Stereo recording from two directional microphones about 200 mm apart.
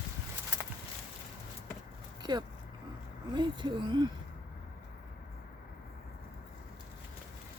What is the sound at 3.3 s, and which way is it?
Speech, 20° right (ahead or behind).